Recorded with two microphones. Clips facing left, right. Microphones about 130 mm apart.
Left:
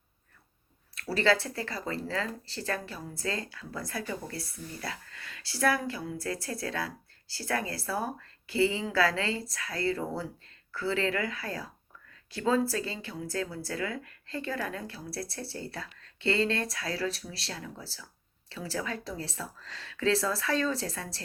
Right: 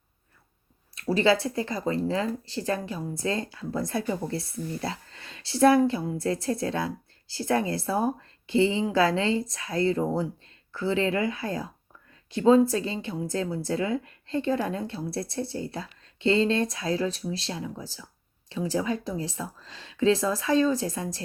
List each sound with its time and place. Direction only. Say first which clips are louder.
0.9 s speech: right 4 dB; 20° right (ahead or behind)